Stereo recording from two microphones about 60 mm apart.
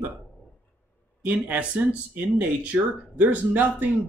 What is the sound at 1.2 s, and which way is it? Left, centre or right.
Speech, right.